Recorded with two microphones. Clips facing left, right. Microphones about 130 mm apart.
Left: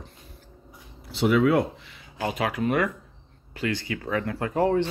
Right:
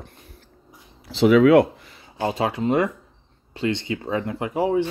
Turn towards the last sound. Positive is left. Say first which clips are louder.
# right 1 dB
turn(degrees=-10)  # may be behind; listen again after turning